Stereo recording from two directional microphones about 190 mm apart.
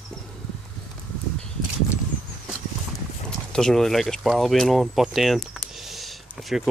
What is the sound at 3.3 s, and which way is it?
Speech, 5° left (ahead or behind).